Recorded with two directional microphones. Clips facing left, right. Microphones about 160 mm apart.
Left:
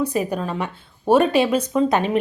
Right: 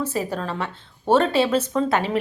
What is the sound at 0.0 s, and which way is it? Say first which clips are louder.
A woman's voice: left 3 dB; 15° left (ahead or behind).